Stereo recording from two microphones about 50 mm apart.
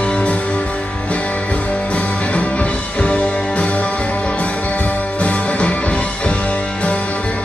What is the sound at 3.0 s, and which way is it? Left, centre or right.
Music, left.